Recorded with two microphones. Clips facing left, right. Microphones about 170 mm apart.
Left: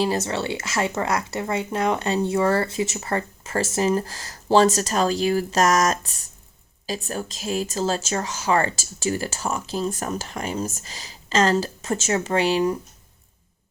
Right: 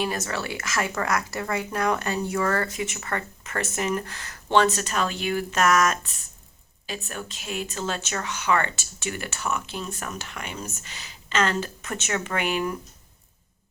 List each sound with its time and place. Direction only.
0.0 s speech: 30° left (ahead or behind)